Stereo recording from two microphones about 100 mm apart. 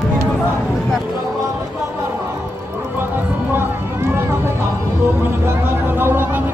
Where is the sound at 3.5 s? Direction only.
25° right (ahead or behind).